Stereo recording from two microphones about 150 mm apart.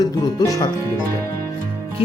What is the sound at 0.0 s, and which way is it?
Speech, 25° left (ahead or behind).